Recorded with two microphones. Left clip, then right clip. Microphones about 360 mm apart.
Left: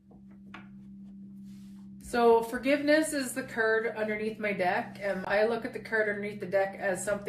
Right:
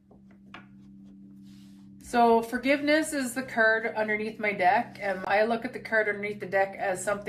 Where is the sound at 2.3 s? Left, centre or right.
Right.